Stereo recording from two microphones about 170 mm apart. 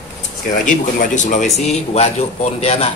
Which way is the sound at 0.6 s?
50° left (ahead or behind).